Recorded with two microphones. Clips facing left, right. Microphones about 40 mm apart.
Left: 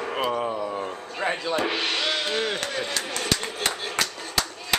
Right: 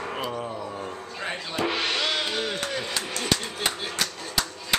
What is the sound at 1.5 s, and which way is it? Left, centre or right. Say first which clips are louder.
Speech: left 1 dB; centre.